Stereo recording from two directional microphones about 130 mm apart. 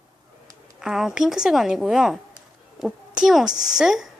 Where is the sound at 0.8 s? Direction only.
5° right (ahead or behind).